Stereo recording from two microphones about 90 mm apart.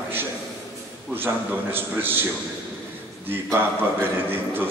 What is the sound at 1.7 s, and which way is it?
A man's voice, 25° right (ahead or behind).